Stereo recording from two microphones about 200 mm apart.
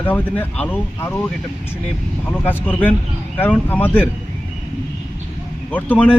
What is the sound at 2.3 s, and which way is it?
A man's voice, 10° left (ahead or behind).